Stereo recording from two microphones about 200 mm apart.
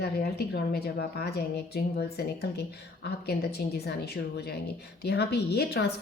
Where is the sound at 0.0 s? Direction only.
50° left (ahead or behind).